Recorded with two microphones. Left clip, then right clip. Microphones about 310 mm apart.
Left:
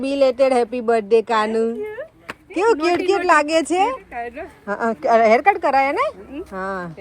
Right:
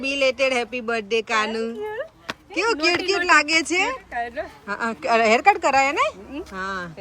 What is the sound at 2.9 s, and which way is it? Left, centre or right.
A woman's voice, centre.